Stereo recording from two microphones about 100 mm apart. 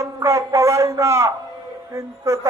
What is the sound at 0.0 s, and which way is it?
A man's voice, 30° right (ahead or behind).